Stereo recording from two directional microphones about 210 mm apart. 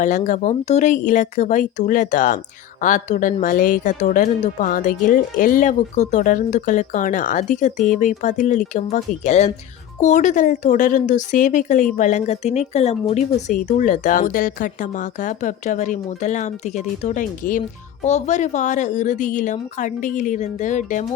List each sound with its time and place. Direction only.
0.3 s speech: 35° left (ahead or behind)